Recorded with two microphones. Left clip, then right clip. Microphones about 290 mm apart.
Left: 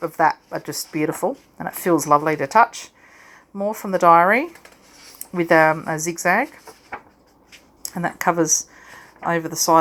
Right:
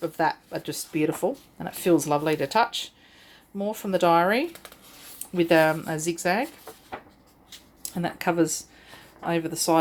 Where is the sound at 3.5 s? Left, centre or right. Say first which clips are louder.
Left 4 dB; centre.